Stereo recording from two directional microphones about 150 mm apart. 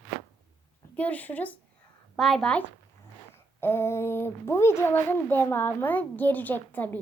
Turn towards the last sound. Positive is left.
turn(degrees=10)  # may be behind; listen again after turning